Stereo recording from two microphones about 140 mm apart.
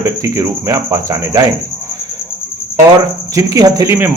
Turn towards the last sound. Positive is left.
turn(degrees=-20)  # may be behind; listen again after turning